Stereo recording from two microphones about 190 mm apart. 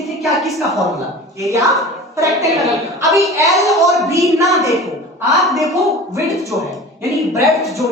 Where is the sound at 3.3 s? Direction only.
15° right (ahead or behind).